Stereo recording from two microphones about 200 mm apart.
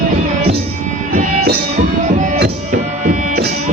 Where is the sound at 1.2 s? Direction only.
40° right (ahead or behind).